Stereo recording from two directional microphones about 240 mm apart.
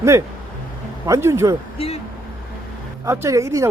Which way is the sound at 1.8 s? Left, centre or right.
Left.